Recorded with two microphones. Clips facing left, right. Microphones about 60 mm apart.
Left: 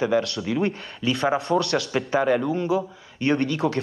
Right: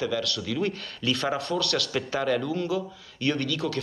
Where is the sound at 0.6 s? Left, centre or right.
Centre.